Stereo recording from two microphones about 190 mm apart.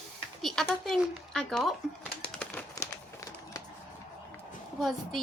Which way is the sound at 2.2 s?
5° left (ahead or behind).